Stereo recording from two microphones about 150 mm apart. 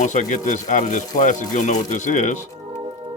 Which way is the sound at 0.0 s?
55° left (ahead or behind).